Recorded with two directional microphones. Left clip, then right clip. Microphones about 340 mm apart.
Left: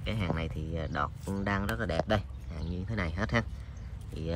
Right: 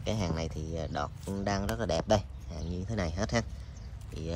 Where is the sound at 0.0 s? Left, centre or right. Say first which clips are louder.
Right 1 dB; centre.